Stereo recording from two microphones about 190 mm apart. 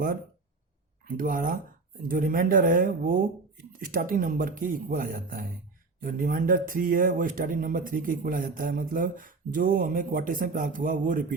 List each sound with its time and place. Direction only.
1.0 s speech: 45° right (ahead or behind)